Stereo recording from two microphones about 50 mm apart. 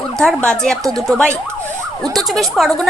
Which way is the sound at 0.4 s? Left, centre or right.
Centre.